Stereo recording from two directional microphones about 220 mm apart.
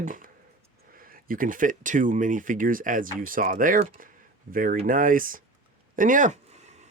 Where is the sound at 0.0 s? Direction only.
35° right (ahead or behind).